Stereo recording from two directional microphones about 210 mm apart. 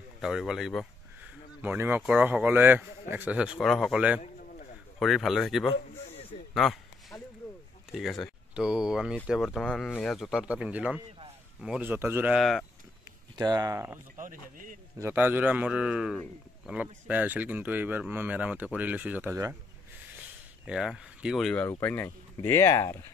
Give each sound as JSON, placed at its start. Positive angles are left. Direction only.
{"t": 0.2, "sound": "speech", "side_deg": 0}
{"t": 6.5, "sound": "a sound", "side_deg": 0}
{"t": 7.9, "sound": "speech", "side_deg": 0}
{"t": 13.4, "sound": "speech", "side_deg": -20}
{"t": 14.1, "sound": "speech", "side_deg": -40}
{"t": 15.0, "sound": "speech", "side_deg": -10}
{"t": 20.6, "sound": "speech", "side_deg": 0}